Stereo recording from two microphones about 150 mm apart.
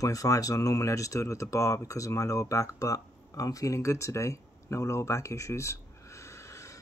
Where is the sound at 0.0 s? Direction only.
20° left (ahead or behind).